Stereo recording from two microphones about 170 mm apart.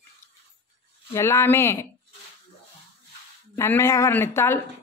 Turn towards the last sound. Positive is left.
turn(degrees=15)  # may be behind; listen again after turning